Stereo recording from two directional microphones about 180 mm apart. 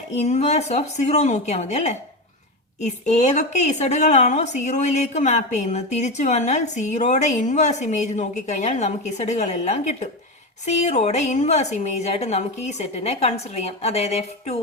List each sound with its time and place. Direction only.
0.2 s a woman's voice: 40° left (ahead or behind)